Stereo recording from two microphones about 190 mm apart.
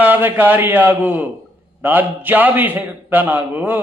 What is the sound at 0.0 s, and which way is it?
A man's voice, 10° right (ahead or behind).